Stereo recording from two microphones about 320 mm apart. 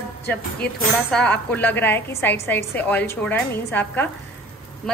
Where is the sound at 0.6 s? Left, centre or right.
Left.